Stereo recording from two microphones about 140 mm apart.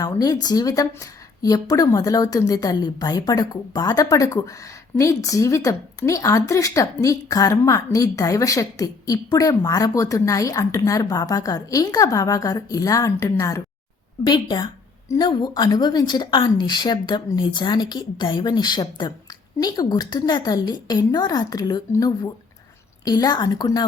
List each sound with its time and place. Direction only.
0.0 s a woman's voice: 25° left (ahead or behind)